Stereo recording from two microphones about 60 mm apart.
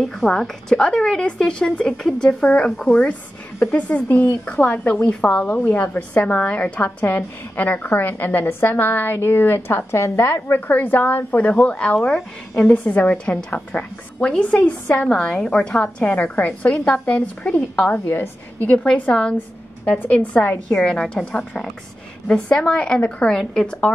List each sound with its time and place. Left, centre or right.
0.0 s a woman's voice: centre
3.7 s a woman's voice: left
10.2 s a woman's voice: left; by 12.6 s centre
12.6 s a woman's voice: left
18.0 s a woman's voice: left
18.6 s a woman's voice: left
20.7 s a woman's voice: centre
23.2 s a woman's voice: centre